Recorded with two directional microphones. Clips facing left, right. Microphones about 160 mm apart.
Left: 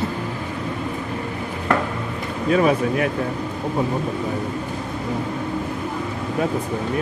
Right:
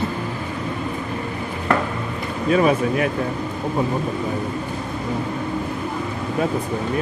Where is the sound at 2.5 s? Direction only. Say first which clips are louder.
Even; 20° right (ahead or behind).